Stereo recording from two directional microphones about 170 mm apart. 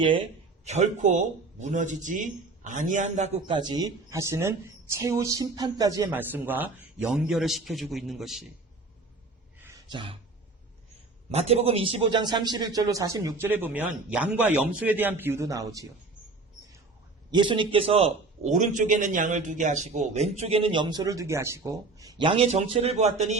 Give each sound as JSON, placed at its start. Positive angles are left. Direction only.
{"t": 0.6, "sound": "a man's voice", "side_deg": -40}
{"t": 6.1, "sound": "a man's voice", "side_deg": -10}
{"t": 9.6, "sound": "a sound", "side_deg": -15}
{"t": 9.9, "sound": "a man's voice", "side_deg": -30}
{"t": 11.3, "sound": "a man's voice", "side_deg": -40}
{"t": 17.3, "sound": "a man's voice", "side_deg": -30}